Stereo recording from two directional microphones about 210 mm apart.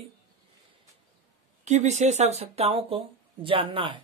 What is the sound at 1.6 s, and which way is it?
Speech, 35° right (ahead or behind).